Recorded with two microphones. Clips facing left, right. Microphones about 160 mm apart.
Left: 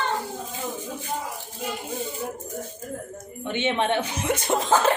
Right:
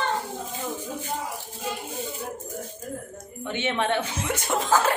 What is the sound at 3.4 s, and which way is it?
Speech, 20° left (ahead or behind).